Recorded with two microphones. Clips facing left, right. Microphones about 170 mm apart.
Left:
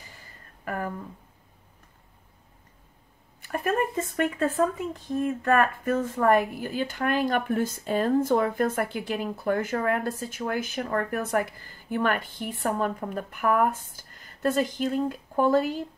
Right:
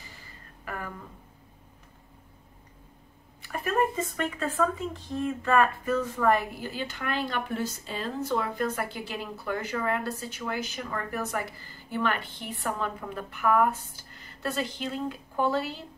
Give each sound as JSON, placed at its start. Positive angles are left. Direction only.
{"t": 0.7, "sound": "a woman's voice", "side_deg": 45}
{"t": 3.4, "sound": "a sound", "side_deg": 50}
{"t": 5.1, "sound": "a woman's voice", "side_deg": 50}